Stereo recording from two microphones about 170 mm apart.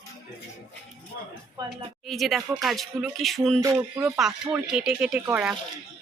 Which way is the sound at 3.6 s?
15° right (ahead or behind).